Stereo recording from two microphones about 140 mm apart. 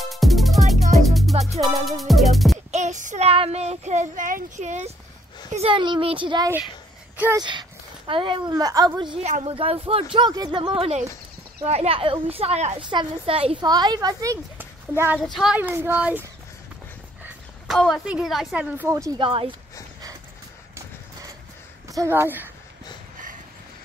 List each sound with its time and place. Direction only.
0.0 s music: centre (ahead or behind)
2.7 s child singing: 60° right (ahead or behind)
3.3 s speech: 45° right (ahead or behind)
5.5 s a woman's voice: 45° right (ahead or behind)
9.2 s speech: 50° right (ahead or behind)
12.7 s a woman's voice: 40° right (ahead or behind)
13.7 s a child's voice: 30° right (ahead or behind)
15.3 s a child's voice: 5° right (ahead or behind)
17.6 s a woman's voice: centre (ahead or behind); by 19.1 s 20° right (ahead or behind)
19.1 s a woman's voice: 40° right (ahead or behind)
20.7 s vehicle: 25° right (ahead or behind)
21.8 s a woman's voice: 20° right (ahead or behind)